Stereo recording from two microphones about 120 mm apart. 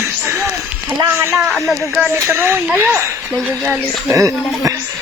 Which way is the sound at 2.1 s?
20° right (ahead or behind).